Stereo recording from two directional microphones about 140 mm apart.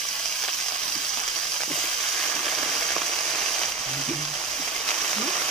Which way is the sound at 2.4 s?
Centre (ahead or behind).